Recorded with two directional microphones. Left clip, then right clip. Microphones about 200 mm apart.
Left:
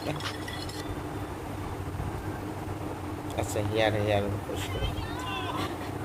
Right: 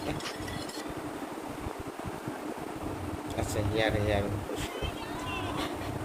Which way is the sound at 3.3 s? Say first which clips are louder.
Left 3 dB; centre (ahead or behind).